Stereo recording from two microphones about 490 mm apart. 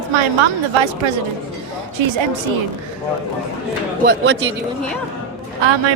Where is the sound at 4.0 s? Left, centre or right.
Right.